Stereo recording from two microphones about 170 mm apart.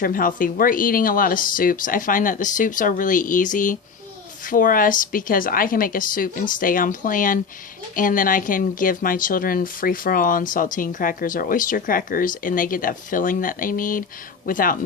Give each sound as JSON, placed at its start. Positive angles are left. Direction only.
{"t": 0.0, "sound": "speech", "side_deg": 55}